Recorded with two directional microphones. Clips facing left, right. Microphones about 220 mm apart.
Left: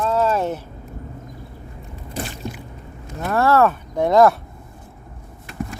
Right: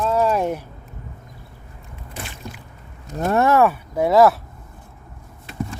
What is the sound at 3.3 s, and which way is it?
Speech, 20° right (ahead or behind).